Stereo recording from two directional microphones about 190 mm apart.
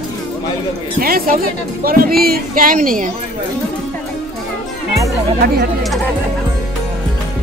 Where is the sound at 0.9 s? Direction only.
50° right (ahead or behind).